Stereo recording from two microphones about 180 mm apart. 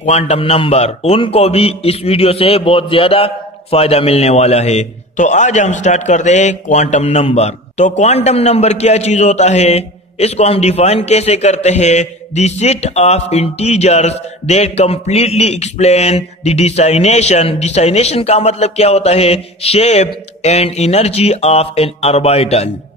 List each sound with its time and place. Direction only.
0.0 s a man's voice: 40° left (ahead or behind)